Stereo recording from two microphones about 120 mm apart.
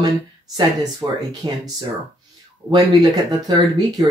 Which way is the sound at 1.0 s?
25° right (ahead or behind).